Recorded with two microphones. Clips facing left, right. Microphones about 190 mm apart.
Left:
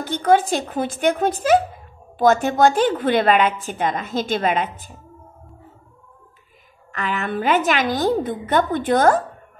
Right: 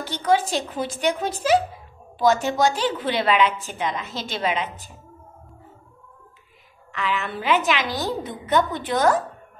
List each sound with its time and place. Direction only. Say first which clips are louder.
0.0 s a woman's voice: left 4 dB; 50° left (ahead or behind)
6.9 s a woman's voice: left 2 dB; 45° left (ahead or behind)